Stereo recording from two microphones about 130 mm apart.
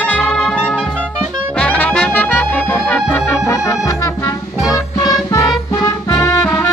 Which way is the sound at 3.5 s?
25° left (ahead or behind).